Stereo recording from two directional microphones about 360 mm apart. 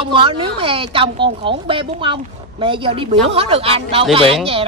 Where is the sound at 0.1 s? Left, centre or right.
Centre.